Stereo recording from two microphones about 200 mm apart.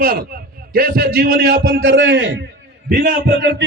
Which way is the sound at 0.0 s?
50° right (ahead or behind).